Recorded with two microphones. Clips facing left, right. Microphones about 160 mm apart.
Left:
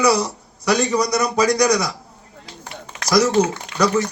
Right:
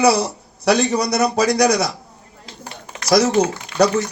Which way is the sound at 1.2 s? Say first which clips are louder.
Right 2 dB; 30° right (ahead or behind).